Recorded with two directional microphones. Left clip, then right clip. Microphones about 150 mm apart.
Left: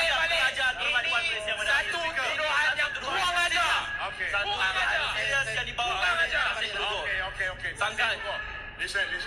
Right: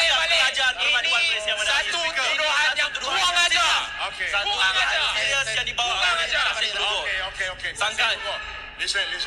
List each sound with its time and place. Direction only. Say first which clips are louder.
0.0 s a sound: right 5 dB; 25° right (ahead or behind)
4.3 s music: right 6 dB; 25° right (ahead or behind)
7.8 s a man's voice: right 5 dB; 25° right (ahead or behind)